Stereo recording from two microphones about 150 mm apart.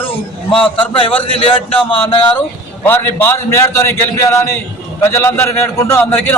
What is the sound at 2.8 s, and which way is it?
A man's voice, 15° left (ahead or behind).